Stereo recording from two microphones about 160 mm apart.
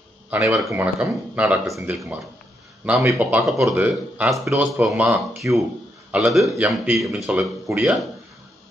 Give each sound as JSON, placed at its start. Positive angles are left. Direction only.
{"t": 0.3, "sound": "speech", "side_deg": -10}